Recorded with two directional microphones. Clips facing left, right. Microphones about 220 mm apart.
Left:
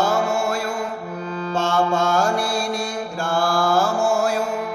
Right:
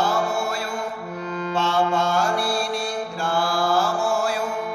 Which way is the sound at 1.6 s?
45° left (ahead or behind).